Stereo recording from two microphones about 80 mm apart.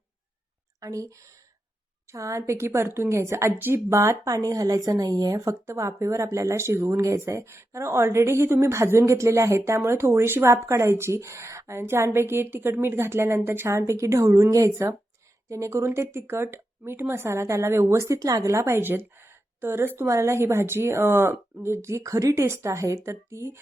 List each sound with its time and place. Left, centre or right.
0.8 s speech: right
2.1 s a woman's voice: right